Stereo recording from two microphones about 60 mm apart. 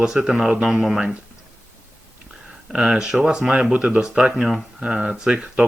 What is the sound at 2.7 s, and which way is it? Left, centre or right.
Speech, centre.